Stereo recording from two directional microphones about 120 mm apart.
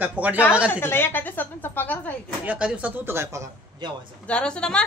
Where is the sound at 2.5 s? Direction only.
10° right (ahead or behind).